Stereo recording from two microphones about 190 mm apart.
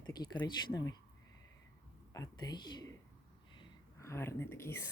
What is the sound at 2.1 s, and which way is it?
Speech, 20° left (ahead or behind).